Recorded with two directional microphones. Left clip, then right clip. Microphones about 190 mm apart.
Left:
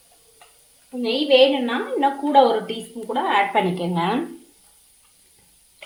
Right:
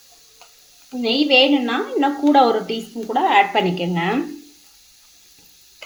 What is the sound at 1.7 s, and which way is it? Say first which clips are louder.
A woman's voice: right 1 dB; 20° right (ahead or behind).